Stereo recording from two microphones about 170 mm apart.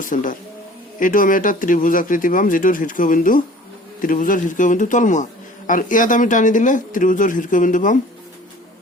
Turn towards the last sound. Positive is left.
turn(degrees=50)  # may be behind; listen again after turning